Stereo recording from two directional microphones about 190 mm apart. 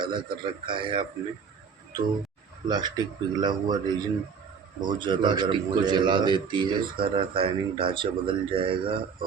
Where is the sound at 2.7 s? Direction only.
20° right (ahead or behind).